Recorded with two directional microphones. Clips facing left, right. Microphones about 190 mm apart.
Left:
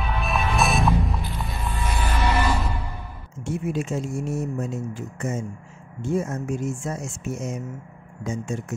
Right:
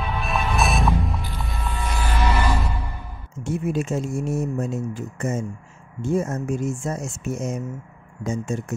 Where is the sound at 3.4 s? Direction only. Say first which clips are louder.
Right 2 dB; 45° right (ahead or behind).